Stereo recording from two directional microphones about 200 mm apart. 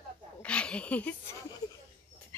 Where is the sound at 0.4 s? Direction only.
5° left (ahead or behind).